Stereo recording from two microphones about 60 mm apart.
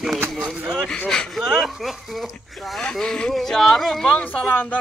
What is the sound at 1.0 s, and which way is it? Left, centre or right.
Speech, centre.